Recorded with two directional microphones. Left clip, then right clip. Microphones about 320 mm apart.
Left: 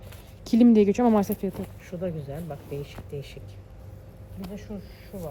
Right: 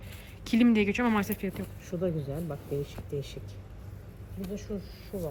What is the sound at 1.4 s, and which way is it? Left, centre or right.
Speech, centre.